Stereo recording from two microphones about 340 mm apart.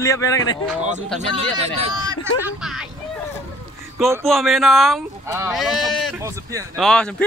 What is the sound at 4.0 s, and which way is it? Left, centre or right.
A man's voice, centre.